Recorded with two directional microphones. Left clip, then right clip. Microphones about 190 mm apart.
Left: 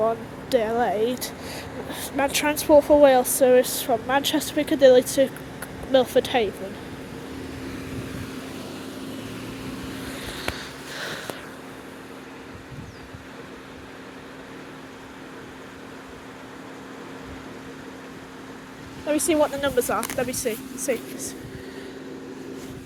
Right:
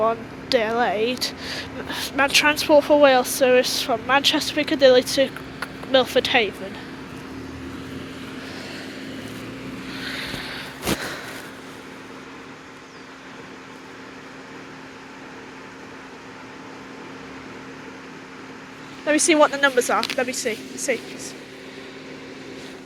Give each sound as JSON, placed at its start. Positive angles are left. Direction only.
{"t": 0.0, "sound": "speech", "side_deg": 15}
{"t": 10.1, "sound": "vehicle", "side_deg": 15}
{"t": 19.0, "sound": "speech", "side_deg": -20}
{"t": 20.1, "sound": "speech", "side_deg": 5}